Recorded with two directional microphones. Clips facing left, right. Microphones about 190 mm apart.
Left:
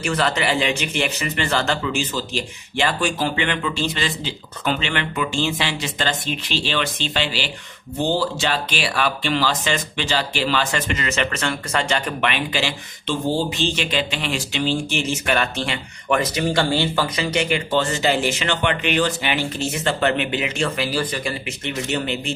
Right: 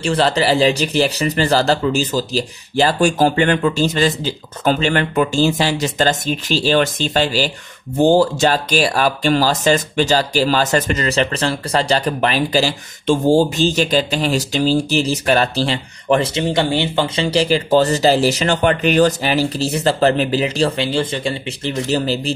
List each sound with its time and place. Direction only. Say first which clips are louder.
0.0 s speech: right 5 dB; 30° right (ahead or behind)